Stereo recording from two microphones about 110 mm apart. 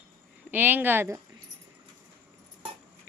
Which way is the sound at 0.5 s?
15° right (ahead or behind).